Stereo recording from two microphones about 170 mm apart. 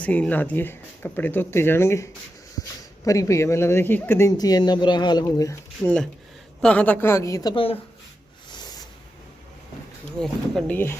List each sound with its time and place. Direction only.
0.0 s speech: 10° left (ahead or behind)
6.6 s speech: 5° left (ahead or behind)
7.5 s speech: 35° left (ahead or behind)
8.4 s a sound: 25° left (ahead or behind)
10.2 s speech: 5° left (ahead or behind)